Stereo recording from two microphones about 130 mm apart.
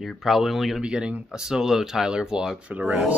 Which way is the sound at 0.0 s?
Centre (ahead or behind).